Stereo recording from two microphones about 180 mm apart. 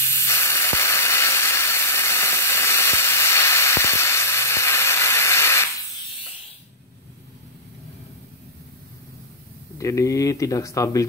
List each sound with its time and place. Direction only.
0.0 s steam: 15° left (ahead or behind)
9.8 s speech: 15° left (ahead or behind)